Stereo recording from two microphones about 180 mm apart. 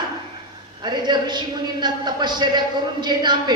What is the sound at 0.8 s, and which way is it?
A man's voice, 25° right (ahead or behind).